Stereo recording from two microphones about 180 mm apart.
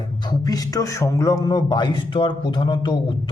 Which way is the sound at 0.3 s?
20° left (ahead or behind).